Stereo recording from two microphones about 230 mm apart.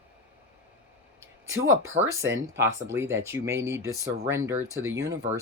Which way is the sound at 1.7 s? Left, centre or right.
Right.